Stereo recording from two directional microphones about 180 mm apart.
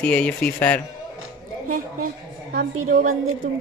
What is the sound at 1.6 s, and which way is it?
A woman's voice, 50° right (ahead or behind).